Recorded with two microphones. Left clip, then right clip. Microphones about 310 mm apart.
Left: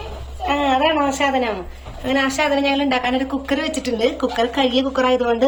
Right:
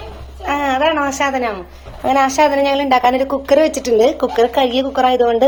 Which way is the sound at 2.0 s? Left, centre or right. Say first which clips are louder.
Right 6 dB; centre.